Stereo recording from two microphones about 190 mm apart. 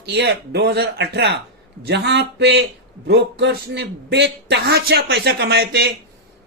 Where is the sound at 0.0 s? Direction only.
60° right (ahead or behind).